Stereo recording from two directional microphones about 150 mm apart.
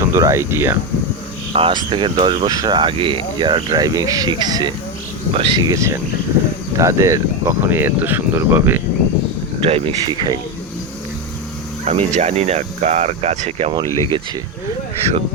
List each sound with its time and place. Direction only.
0.0 s speech: 20° right (ahead or behind)
1.5 s speech: 35° right (ahead or behind); by 8.8 s 15° right (ahead or behind)
9.6 s speech: 40° right (ahead or behind)
11.9 s speech: 45° right (ahead or behind)